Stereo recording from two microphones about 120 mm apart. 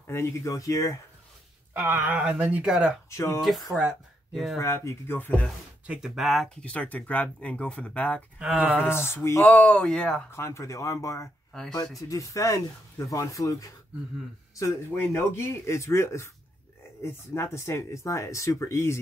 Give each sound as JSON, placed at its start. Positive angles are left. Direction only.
{"t": 0.0, "sound": "speech", "side_deg": 20}
{"t": 1.7, "sound": "speech", "side_deg": -15}
{"t": 3.1, "sound": "speech", "side_deg": 25}
{"t": 3.3, "sound": "speech", "side_deg": 0}
{"t": 4.6, "sound": "speech", "side_deg": 25}
{"t": 5.9, "sound": "speech", "side_deg": -5}
{"t": 8.4, "sound": "speech", "side_deg": -10}
{"t": 8.7, "sound": "speech", "side_deg": 20}
{"t": 10.3, "sound": "speech", "side_deg": 20}